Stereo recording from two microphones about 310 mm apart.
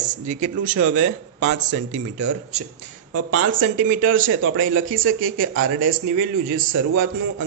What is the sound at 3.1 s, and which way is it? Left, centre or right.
Speech, right.